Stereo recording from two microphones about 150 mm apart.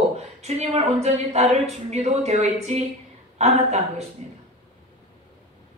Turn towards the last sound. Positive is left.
turn(degrees=-50)  # may be behind; listen again after turning